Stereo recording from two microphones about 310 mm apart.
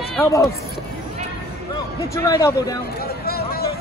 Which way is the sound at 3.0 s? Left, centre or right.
Left.